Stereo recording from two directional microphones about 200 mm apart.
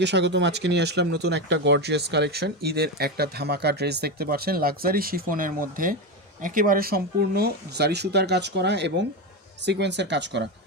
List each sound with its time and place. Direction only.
0.0 s speech: 60° right (ahead or behind)